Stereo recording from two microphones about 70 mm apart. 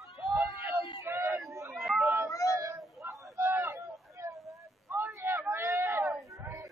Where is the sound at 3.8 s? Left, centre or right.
Right.